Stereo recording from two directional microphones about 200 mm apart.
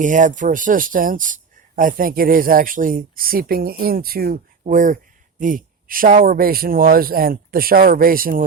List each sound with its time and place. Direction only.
0.0 s speech: 40° right (ahead or behind)